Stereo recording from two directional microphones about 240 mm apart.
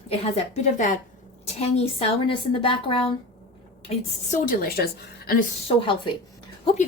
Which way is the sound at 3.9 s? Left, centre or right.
Left.